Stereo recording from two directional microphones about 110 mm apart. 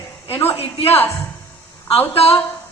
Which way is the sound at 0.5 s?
65° left (ahead or behind).